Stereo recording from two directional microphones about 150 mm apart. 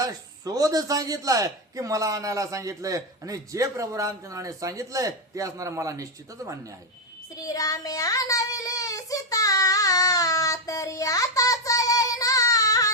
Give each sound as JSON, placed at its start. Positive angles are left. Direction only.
{"t": 0.0, "sound": "a man's voice", "side_deg": -25}
{"t": 7.3, "sound": "child singing", "side_deg": 25}